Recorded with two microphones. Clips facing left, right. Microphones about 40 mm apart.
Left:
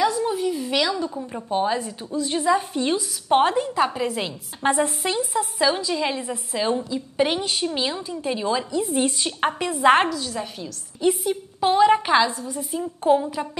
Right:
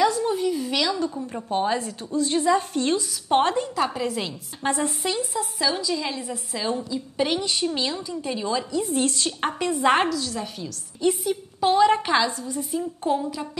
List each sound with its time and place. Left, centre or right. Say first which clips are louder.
0.0 s a sound: even; centre
1.0 s a woman's voice: right 1 dB; centre
12.3 s a woman's voice: left 1 dB; left
12.5 s a woman's voice: even; centre